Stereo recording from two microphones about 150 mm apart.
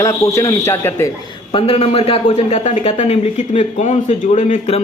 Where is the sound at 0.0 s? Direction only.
20° left (ahead or behind).